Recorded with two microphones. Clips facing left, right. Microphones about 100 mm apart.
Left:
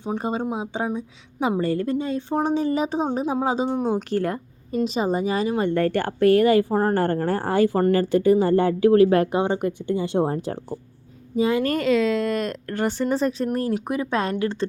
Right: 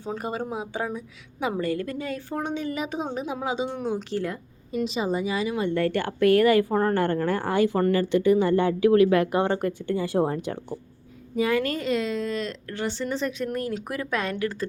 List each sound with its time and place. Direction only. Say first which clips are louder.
0.0 s speech: left 4 dB; 20° left (ahead or behind)
9.3 s speech: left 1 dB; 15° left (ahead or behind)
11.8 s speech: left 6 dB; 80° left
12.4 s speech: left 5 dB; 50° left (ahead or behind); by 13.7 s 35° left (ahead or behind)
13.8 s speech: left 4 dB; 20° left (ahead or behind)